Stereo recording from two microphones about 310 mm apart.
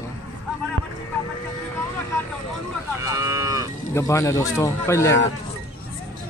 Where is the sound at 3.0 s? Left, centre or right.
Centre.